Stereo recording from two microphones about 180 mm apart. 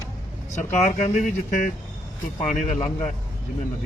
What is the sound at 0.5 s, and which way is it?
A man's voice, 40° left (ahead or behind).